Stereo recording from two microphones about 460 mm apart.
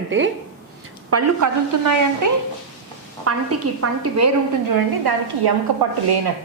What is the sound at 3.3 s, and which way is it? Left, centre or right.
A woman's voice, right.